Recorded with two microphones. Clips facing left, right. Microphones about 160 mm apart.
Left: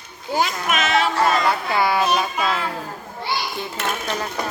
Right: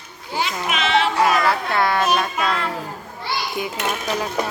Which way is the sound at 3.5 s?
10° right (ahead or behind).